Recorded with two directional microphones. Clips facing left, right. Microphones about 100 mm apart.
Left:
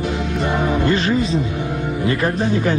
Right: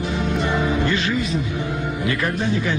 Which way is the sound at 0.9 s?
40° left (ahead or behind).